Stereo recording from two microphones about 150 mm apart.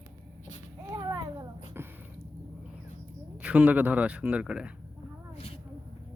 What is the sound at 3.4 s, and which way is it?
A man's voice, 10° right (ahead or behind).